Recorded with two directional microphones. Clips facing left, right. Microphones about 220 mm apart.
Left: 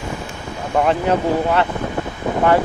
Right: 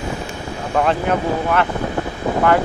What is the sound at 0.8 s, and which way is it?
Speech, 20° left (ahead or behind).